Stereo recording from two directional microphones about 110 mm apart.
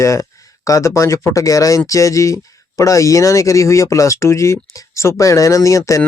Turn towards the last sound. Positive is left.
turn(degrees=30)  # may be behind; listen again after turning